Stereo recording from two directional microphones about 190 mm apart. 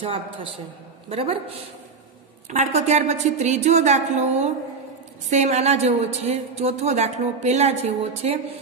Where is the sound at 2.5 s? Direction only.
35° right (ahead or behind).